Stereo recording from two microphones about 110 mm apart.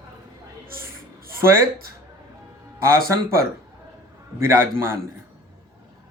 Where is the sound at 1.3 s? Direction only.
25° right (ahead or behind).